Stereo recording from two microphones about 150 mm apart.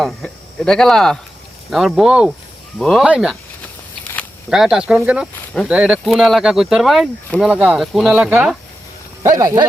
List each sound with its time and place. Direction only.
0.0 s speech: 5° left (ahead or behind)
4.4 s speech: 5° right (ahead or behind)
9.4 s speech: 20° right (ahead or behind)